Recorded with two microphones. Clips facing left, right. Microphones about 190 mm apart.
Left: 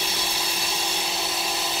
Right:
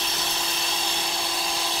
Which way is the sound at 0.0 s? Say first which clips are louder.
Left 1 dB; 10° left (ahead or behind).